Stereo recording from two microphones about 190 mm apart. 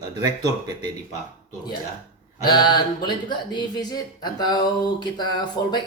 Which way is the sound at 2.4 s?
20° left (ahead or behind).